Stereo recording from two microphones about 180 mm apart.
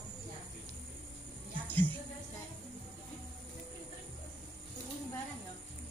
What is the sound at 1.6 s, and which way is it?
Music, 10° left (ahead or behind).